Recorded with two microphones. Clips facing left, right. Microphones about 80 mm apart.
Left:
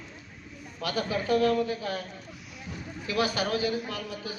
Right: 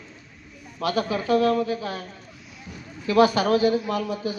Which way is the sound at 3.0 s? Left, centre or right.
Right.